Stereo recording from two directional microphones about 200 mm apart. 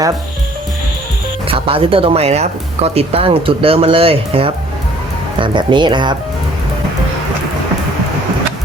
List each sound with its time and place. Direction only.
1.5 s speech: 25° right (ahead or behind)